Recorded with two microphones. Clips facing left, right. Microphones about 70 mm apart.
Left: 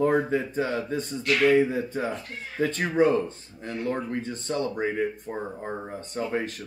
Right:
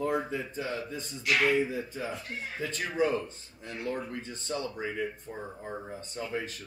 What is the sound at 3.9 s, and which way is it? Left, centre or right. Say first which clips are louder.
Speech: left 5 dB; left.